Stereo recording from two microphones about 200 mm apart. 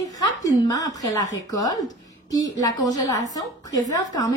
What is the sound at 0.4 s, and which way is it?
A woman's voice, 15° left (ahead or behind).